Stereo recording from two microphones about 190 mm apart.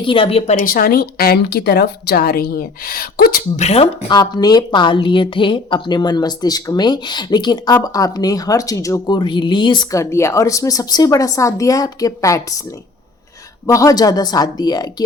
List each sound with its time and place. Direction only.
0.0 s speech: 25° left (ahead or behind); by 3.4 s 50° left (ahead or behind)
3.6 s speech: 35° left (ahead or behind)
4.1 s a woman's voice: 20° left (ahead or behind)
13.7 s a woman's voice: 20° left (ahead or behind)